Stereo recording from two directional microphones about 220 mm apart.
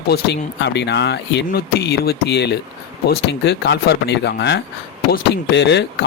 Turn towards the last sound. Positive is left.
turn(degrees=50)  # may be behind; listen again after turning